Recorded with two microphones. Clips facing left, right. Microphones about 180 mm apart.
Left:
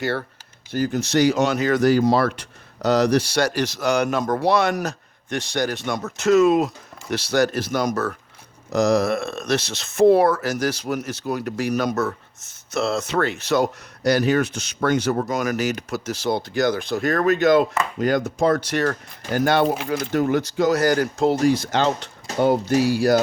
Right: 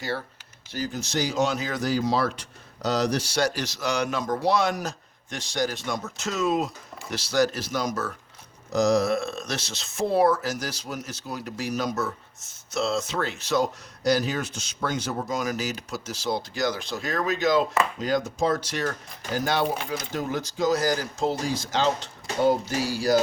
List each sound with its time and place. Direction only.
0.0 s speech: 65° left (ahead or behind)